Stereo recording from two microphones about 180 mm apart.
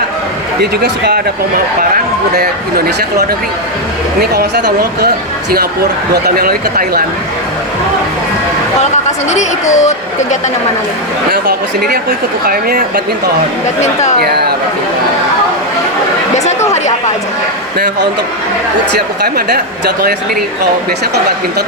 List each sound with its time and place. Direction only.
0.6 s a man's voice: 60° right (ahead or behind)
6.2 s a man's voice: 55° right (ahead or behind)
8.8 s speech: 40° left (ahead or behind)
11.3 s a man's voice: 55° right (ahead or behind)
13.8 s speech: 40° left (ahead or behind)
14.2 s speech: 60° right (ahead or behind)
16.3 s chatter: 40° left (ahead or behind)
17.7 s a man's voice: 70° right (ahead or behind)